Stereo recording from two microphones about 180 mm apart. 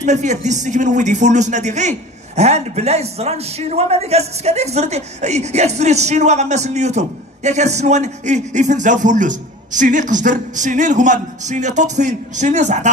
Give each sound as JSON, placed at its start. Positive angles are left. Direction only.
{"t": 0.0, "sound": "a man's voice", "side_deg": -40}